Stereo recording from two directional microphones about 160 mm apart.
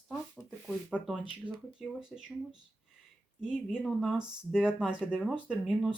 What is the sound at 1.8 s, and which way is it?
Speech, 5° right (ahead or behind).